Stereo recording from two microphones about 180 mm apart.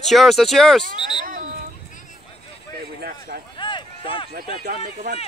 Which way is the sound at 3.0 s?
55° right (ahead or behind).